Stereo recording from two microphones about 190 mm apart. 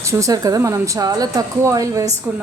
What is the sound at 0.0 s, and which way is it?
Speech, 15° right (ahead or behind).